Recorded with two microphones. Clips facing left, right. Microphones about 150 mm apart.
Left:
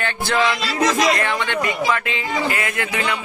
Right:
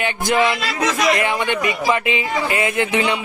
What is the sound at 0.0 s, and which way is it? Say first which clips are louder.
A man's voice: right 2 dB; 15° right (ahead or behind).